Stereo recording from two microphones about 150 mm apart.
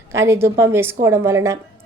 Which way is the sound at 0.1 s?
20° right (ahead or behind).